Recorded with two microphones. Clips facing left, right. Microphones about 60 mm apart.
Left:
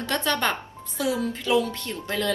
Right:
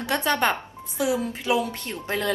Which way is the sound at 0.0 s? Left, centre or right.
Right.